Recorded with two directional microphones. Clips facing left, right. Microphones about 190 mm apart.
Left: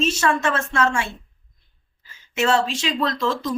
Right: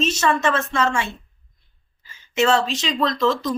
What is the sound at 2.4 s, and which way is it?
Speech, 5° left (ahead or behind).